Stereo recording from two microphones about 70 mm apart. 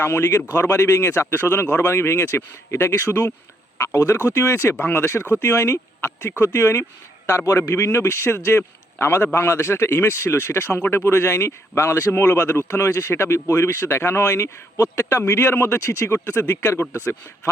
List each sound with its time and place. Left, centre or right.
0.0 s a man's voice: left